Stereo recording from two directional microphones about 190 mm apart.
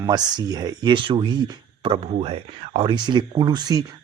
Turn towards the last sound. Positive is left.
turn(degrees=-20)  # may be behind; listen again after turning